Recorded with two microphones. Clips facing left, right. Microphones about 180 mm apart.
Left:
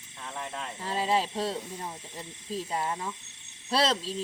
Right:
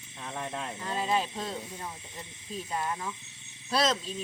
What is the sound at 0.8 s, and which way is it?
Speech, 30° left (ahead or behind).